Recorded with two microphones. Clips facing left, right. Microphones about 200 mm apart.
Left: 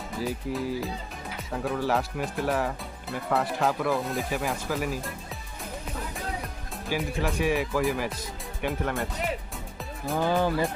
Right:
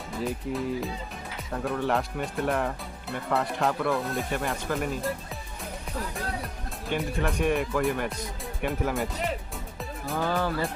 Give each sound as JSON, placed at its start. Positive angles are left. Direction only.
{"t": 0.2, "sound": "speech", "side_deg": 0}
{"t": 6.8, "sound": "speech", "side_deg": 5}
{"t": 10.2, "sound": "speech", "side_deg": 15}